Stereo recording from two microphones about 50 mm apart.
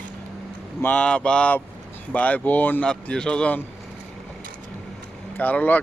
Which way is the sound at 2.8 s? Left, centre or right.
Centre.